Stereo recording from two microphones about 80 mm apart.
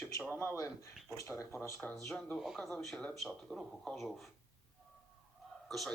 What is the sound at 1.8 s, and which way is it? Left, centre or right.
Speech, left.